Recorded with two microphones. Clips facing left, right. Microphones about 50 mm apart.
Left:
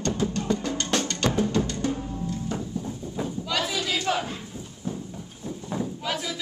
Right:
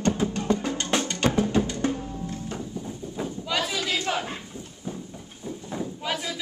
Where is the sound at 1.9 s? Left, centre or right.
Centre.